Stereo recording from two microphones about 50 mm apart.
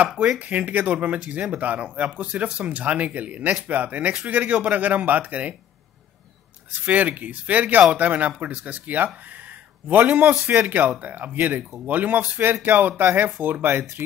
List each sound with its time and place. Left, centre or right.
0.4 s speech: right
6.9 s speech: right